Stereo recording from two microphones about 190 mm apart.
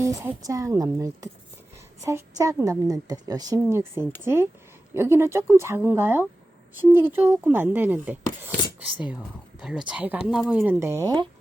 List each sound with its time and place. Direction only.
0.0 s a woman's voice: 15° right (ahead or behind)